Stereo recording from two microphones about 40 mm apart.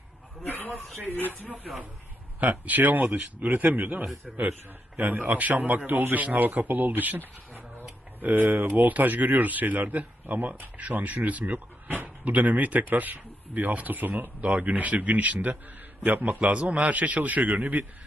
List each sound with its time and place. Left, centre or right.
0.4 s a sound: left
2.4 s a man's voice: right
4.3 s a man's voice: centre
4.9 s a man's voice: right
16.4 s a man's voice: right